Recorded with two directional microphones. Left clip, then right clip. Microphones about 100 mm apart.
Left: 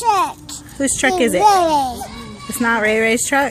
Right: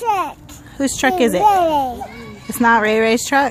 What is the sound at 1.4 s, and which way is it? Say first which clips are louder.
Speech: left 2 dB; 15° right (ahead or behind).